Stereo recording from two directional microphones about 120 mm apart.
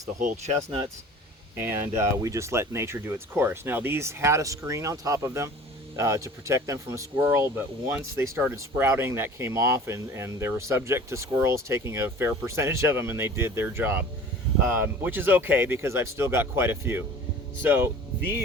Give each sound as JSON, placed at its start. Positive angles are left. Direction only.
{"t": 0.2, "sound": "speech", "side_deg": -90}
{"t": 1.7, "sound": "speech", "side_deg": -20}